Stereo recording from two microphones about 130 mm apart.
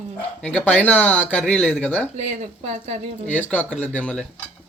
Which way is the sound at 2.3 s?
60° right (ahead or behind).